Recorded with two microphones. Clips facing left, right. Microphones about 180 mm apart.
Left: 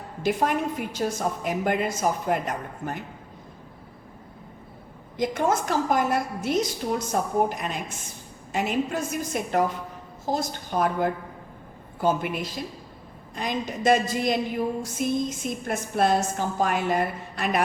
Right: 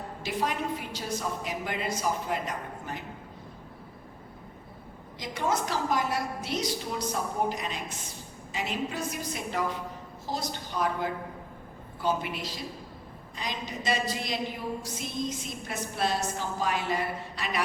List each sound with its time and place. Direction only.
0.2 s a woman's voice: 50° left (ahead or behind)
5.1 s a woman's voice: 50° left (ahead or behind)